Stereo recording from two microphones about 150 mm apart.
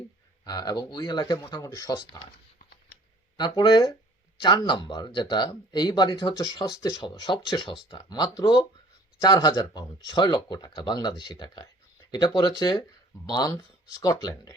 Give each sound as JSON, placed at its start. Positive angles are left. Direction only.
{"t": 0.4, "sound": "speech", "side_deg": 25}
{"t": 3.3, "sound": "speech", "side_deg": 30}